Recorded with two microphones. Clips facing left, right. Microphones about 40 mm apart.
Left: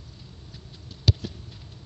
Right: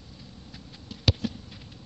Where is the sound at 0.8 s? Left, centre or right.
Right.